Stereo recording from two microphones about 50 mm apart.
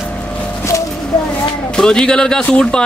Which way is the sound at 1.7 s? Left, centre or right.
Centre.